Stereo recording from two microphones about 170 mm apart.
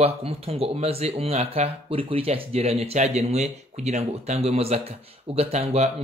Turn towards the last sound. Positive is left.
turn(degrees=-40)  # may be behind; listen again after turning